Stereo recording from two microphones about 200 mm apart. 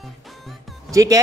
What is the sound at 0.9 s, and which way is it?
Speech, 15° right (ahead or behind).